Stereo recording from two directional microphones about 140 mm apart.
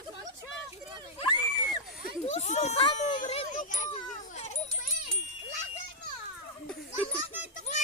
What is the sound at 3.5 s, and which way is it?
Children playing, 65° left (ahead or behind).